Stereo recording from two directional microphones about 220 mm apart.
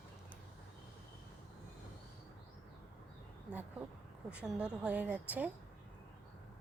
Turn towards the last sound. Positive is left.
turn(degrees=-5)  # may be behind; listen again after turning